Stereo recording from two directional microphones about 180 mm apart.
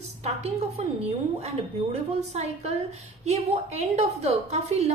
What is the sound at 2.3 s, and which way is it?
A woman's voice, 35° right (ahead or behind).